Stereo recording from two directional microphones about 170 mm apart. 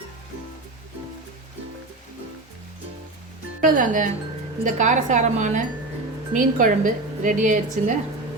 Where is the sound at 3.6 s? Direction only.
50° right (ahead or behind).